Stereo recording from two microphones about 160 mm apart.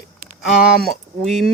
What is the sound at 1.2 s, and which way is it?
Speech, centre (ahead or behind).